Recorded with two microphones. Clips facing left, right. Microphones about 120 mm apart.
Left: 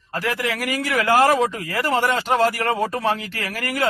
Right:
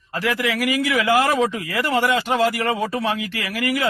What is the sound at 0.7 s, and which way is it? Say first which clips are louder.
A man's voice: even; 40° left (ahead or behind).